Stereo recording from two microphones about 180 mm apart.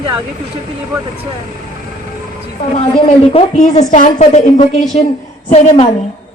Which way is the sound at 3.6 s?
40° left (ahead or behind).